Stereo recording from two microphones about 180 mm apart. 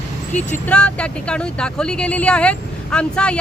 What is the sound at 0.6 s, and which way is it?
Speech, 5° left (ahead or behind).